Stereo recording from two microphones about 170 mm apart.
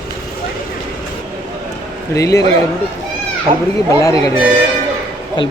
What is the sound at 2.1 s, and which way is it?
Speech, 20° left (ahead or behind).